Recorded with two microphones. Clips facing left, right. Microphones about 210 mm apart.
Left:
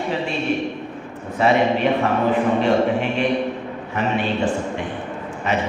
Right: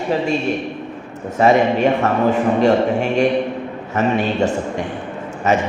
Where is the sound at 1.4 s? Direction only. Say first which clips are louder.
Right 3 dB; 45° right (ahead or behind).